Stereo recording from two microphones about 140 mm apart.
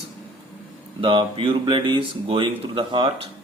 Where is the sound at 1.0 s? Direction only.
40° right (ahead or behind).